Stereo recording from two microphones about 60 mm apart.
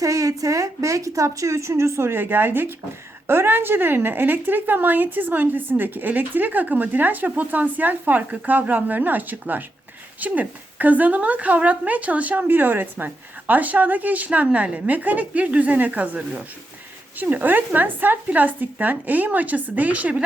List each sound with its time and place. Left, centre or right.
0.0 s a woman's voice: right